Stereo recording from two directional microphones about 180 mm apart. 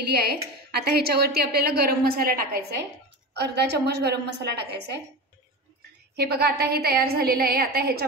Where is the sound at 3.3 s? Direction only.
70° right (ahead or behind).